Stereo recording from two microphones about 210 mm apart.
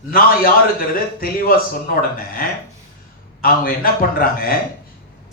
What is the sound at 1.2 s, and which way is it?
Speech, 45° left (ahead or behind).